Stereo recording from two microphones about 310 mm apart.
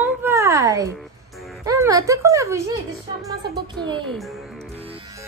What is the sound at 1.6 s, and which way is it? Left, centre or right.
Speech, centre.